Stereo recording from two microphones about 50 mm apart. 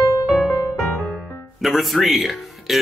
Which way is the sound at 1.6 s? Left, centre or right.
Centre.